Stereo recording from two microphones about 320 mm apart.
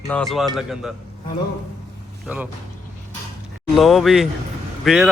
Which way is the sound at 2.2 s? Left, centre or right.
Centre.